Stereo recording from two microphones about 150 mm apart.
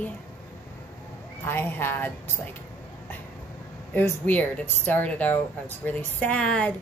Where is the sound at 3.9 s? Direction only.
10° left (ahead or behind).